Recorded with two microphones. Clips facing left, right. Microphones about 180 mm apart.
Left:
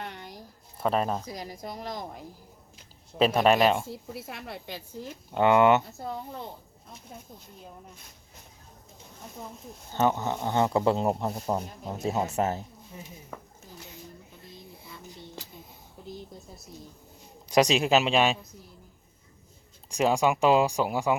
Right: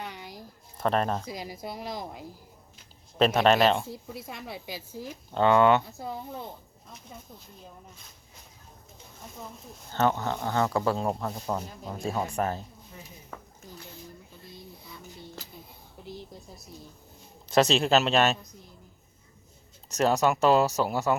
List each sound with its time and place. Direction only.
0.0 s a sound: 5° right (ahead or behind)
0.8 s a woman's voice: 5° left (ahead or behind)
1.2 s speech: 10° right (ahead or behind)
3.2 s a woman's voice: 5° left (ahead or behind)
5.3 s speech: 15° left (ahead or behind)
9.9 s speech: 15° left (ahead or behind)
17.5 s speech: 15° left (ahead or behind)
19.9 s speech: 10° left (ahead or behind)